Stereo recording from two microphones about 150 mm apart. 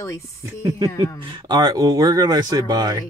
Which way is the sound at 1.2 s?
30° right (ahead or behind).